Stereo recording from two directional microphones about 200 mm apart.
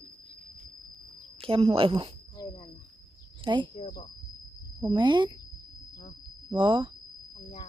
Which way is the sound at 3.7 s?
25° left (ahead or behind).